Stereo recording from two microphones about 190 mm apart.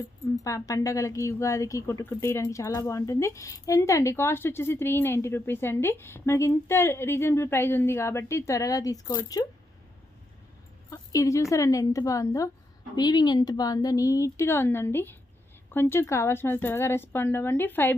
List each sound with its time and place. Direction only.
0.4 s speech: 20° left (ahead or behind)
10.9 s speech: 15° left (ahead or behind)